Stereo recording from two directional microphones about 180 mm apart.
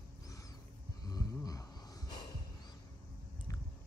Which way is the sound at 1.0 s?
20° left (ahead or behind).